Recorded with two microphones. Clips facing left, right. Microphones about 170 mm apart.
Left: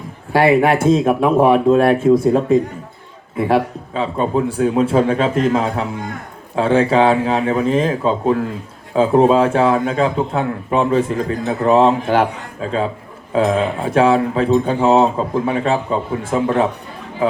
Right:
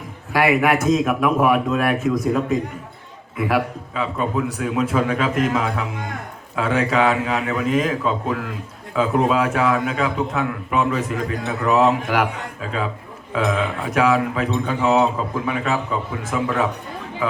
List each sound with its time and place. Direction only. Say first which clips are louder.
0.3 s a man's voice: left 5 dB; 30° left (ahead or behind)